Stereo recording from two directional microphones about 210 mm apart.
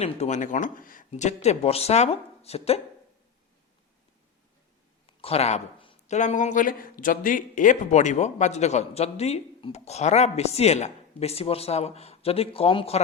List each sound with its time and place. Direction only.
0.0 s speech: 35° left (ahead or behind)
5.0 s speech: 30° left (ahead or behind)